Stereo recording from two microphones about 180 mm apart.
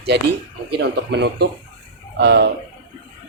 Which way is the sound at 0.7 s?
65° right (ahead or behind).